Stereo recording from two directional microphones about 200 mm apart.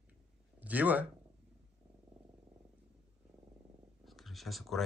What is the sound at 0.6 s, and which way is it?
Speech, 10° right (ahead or behind).